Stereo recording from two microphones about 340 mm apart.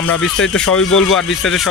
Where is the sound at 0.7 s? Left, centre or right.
Left.